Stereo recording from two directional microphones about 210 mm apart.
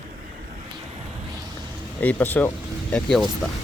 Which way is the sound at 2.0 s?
10° left (ahead or behind).